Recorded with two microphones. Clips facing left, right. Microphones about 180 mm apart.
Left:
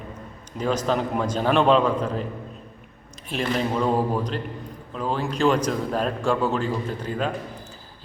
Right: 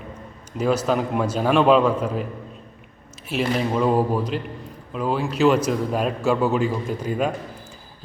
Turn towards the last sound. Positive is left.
turn(degrees=-10)  # may be behind; listen again after turning